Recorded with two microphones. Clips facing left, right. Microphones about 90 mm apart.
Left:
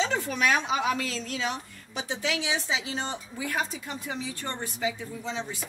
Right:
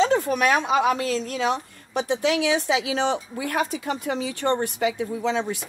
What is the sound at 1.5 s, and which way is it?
Speech, 60° right (ahead or behind).